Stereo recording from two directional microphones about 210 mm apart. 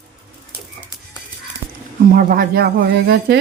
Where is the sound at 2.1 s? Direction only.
40° right (ahead or behind).